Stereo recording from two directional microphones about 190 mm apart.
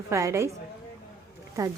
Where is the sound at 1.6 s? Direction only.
15° right (ahead or behind).